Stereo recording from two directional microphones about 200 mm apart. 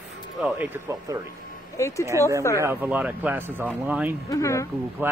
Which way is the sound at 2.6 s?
10° right (ahead or behind).